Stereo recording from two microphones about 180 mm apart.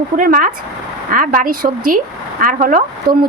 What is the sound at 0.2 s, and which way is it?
Speech, 50° right (ahead or behind).